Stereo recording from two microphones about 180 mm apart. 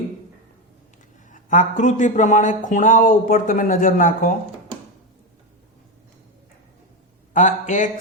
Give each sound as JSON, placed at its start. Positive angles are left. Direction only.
{"t": 1.3, "sound": "a man's voice", "side_deg": 45}
{"t": 7.3, "sound": "a man's voice", "side_deg": 45}